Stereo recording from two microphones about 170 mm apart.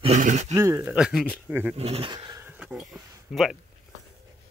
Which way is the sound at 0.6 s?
15° right (ahead or behind).